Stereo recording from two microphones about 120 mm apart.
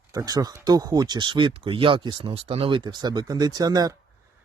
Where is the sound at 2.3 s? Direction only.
55° right (ahead or behind); by 3.9 s 35° right (ahead or behind).